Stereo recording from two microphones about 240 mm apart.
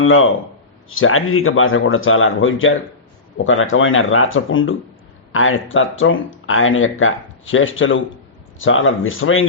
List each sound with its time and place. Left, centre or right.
0.0 s speech: left